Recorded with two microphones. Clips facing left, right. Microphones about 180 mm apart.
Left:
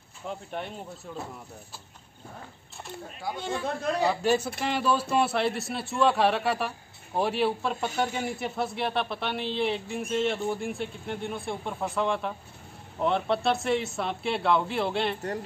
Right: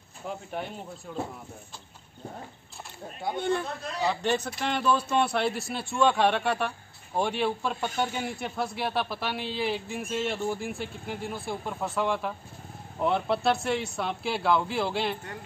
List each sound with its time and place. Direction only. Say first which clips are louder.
0.3 s speech: even; centre (ahead or behind)
3.3 s speech: right 6 dB; 55° right (ahead or behind)
4.1 s speech: left 3 dB; 5° left (ahead or behind)